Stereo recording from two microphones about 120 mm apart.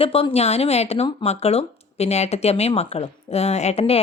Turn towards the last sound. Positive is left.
turn(degrees=55)  # may be behind; listen again after turning